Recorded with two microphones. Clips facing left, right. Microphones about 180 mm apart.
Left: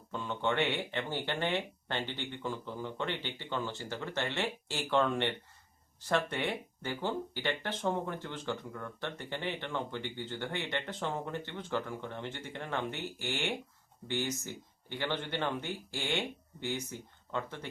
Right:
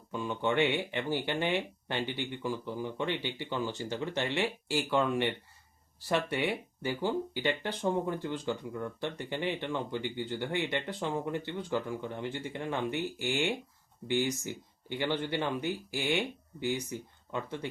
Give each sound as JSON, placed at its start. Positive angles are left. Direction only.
{"t": 0.1, "sound": "speech", "side_deg": -10}